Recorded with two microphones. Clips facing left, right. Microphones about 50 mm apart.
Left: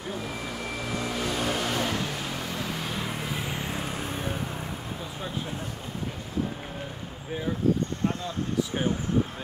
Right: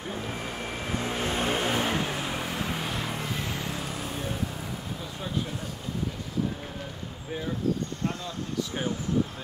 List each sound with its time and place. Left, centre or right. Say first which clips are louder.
0.1 s vehicle: left 1 dB; right
2.8 s vehicle: even; centre
3.5 s vehicle: left 1 dB; left